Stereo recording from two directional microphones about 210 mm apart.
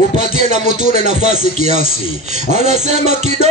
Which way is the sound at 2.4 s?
35° right (ahead or behind).